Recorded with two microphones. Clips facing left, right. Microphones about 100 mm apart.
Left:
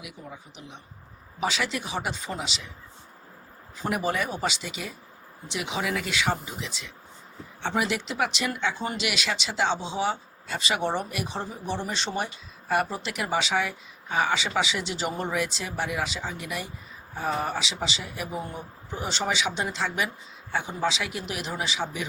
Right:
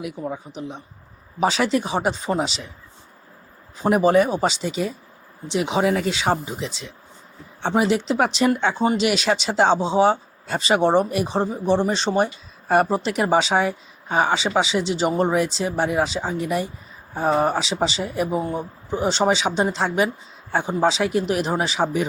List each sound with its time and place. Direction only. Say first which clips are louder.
0.0 s speech: right 13 dB; 45° right (ahead or behind)
3.8 s speech: right 11 dB; 35° right (ahead or behind)